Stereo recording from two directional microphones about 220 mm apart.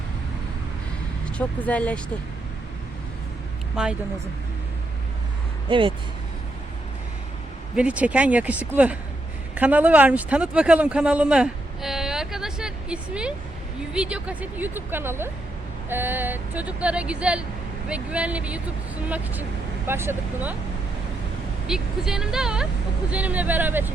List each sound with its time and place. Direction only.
1.4 s speech: 5° left (ahead or behind)
3.8 s speech: 5° right (ahead or behind)
5.6 s speech: 25° right (ahead or behind)
7.8 s speech: 5° right (ahead or behind)
21.7 s speech: centre (ahead or behind)